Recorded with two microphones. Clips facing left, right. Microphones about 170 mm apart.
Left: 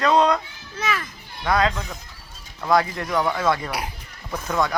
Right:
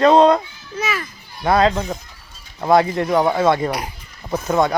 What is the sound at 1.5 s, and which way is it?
Speech, 30° right (ahead or behind).